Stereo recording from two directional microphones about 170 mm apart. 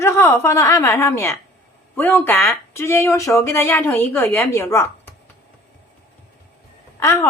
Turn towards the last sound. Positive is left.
turn(degrees=15)  # may be behind; listen again after turning